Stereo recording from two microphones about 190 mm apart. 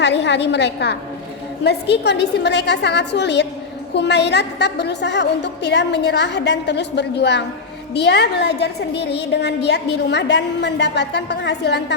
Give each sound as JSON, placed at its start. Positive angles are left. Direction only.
{"t": 0.0, "sound": "a woman's voice", "side_deg": 65}